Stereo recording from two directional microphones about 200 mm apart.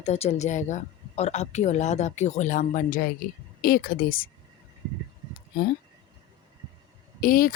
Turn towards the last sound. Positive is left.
turn(degrees=45)  # may be behind; listen again after turning